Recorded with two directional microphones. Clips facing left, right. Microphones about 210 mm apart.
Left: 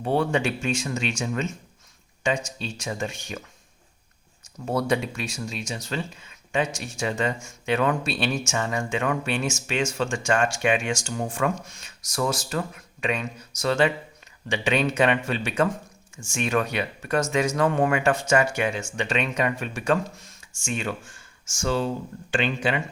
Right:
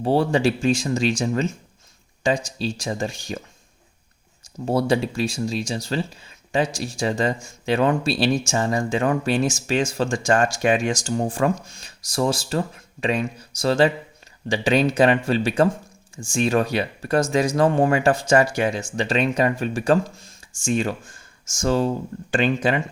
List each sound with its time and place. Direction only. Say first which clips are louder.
0.0 s speech: right 4 dB; 35° right (ahead or behind)
4.6 s speech: right 4 dB; 30° right (ahead or behind)